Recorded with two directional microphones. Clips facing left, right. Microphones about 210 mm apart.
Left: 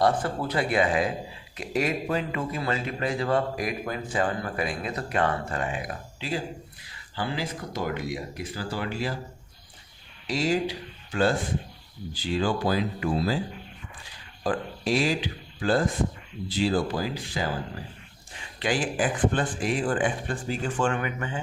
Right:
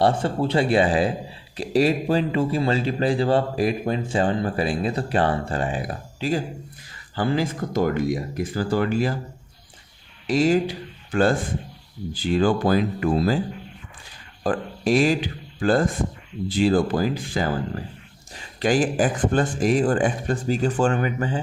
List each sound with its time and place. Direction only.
0.0 s a man's voice: 25° right (ahead or behind); by 9.1 s 50° right (ahead or behind)
10.2 s speech: 50° right (ahead or behind)
14.4 s speech: 50° right (ahead or behind)
18.6 s a man's voice: 45° right (ahead or behind)